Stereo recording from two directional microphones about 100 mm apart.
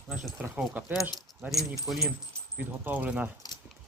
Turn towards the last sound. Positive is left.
turn(degrees=-15)  # may be behind; listen again after turning